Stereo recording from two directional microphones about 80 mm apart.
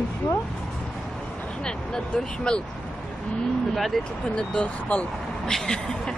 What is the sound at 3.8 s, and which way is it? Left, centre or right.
Speech, centre.